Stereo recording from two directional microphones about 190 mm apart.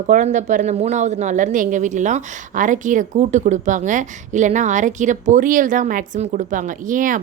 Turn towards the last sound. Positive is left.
turn(degrees=-45)  # may be behind; listen again after turning